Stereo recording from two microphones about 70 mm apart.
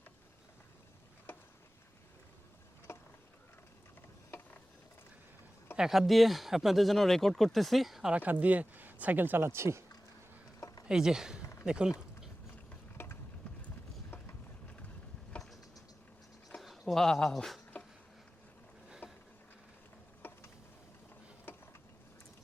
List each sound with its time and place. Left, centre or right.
5.7 s speech: centre
8.1 s speech: right
10.6 s a sound: left
10.8 s speech: centre
11.6 s a sound: centre
13.0 s a sound: left
16.6 s speech: centre
19.0 s bee: left
20.2 s insect: left